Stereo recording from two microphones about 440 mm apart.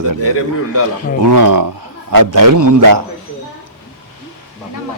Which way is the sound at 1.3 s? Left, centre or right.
Right.